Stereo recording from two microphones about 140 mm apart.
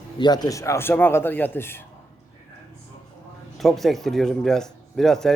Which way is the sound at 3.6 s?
Centre (ahead or behind).